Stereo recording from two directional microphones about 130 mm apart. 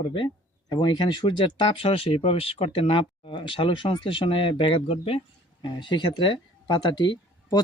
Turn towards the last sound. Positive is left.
turn(degrees=30)  # may be behind; listen again after turning